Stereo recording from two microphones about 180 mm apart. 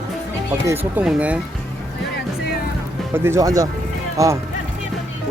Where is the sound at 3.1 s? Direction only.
15° right (ahead or behind).